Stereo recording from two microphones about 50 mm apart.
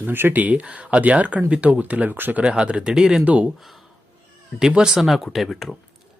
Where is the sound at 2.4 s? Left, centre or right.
Right.